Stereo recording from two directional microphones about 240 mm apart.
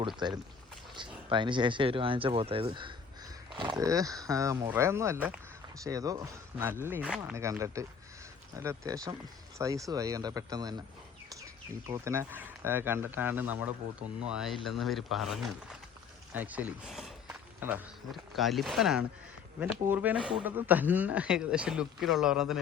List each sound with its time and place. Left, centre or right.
0.2 s speech: centre
11.9 s speech: centre